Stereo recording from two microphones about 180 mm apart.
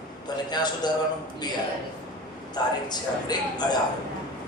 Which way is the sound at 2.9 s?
25° left (ahead or behind).